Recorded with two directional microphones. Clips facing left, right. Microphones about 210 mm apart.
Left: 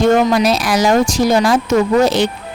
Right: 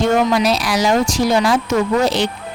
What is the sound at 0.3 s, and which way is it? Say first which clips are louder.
Speech: left 2 dB; 50° left (ahead or behind).